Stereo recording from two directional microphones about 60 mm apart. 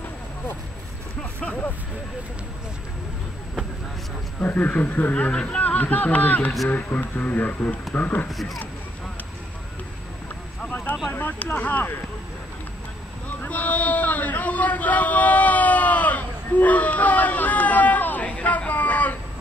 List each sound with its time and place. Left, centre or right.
4.4 s speech: left
5.1 s speech: centre
11.1 s speech: left
13.4 s a sound: left